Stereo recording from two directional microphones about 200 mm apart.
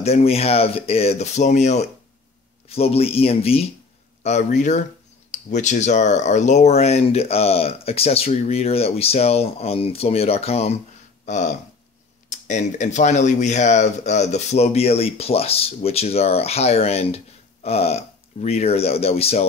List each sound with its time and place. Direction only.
0.0 s speech: 30° left (ahead or behind)